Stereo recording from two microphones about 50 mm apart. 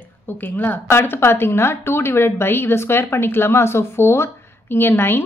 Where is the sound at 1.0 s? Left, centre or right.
Left.